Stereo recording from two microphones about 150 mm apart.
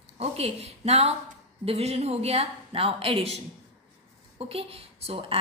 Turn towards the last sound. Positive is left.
turn(degrees=-40)  # may be behind; listen again after turning